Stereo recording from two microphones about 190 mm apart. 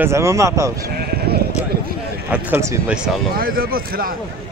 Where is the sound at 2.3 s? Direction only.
15° right (ahead or behind).